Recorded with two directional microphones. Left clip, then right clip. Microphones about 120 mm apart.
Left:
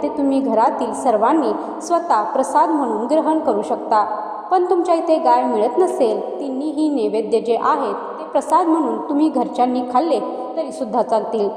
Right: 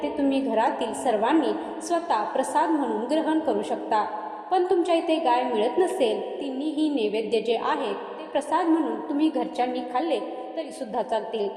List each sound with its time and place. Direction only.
0.0 s a woman's voice: 30° left (ahead or behind)